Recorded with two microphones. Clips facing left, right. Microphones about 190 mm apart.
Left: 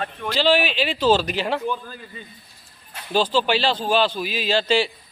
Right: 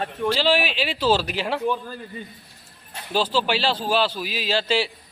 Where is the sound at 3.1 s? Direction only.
5° right (ahead or behind).